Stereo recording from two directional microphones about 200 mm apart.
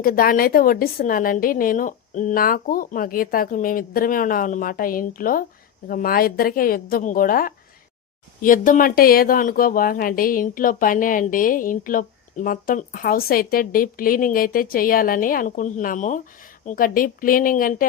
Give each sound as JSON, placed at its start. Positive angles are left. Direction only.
{"t": 0.0, "sound": "speech", "side_deg": 45}